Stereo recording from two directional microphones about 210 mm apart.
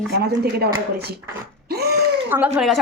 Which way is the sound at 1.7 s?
50° right (ahead or behind).